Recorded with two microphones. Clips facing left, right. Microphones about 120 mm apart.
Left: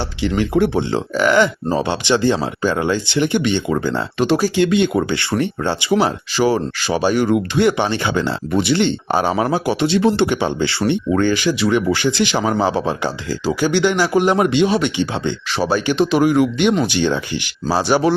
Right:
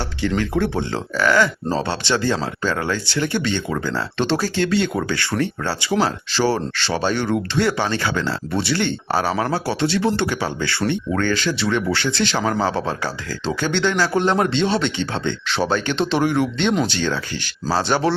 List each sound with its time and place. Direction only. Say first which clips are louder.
0.2 s speech: left 4 dB; 20° left (ahead or behind)